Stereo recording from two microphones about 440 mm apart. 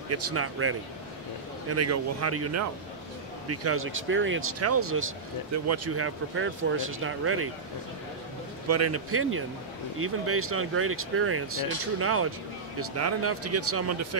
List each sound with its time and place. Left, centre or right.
0.1 s speech: right
8.6 s speech: right